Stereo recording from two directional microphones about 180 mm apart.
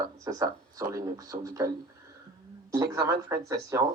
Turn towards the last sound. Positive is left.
turn(degrees=-20)  # may be behind; listen again after turning